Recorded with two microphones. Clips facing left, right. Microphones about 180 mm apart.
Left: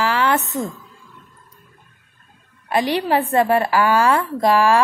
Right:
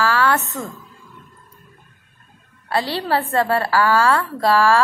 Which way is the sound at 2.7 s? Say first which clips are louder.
Left 3 dB; 15° left (ahead or behind).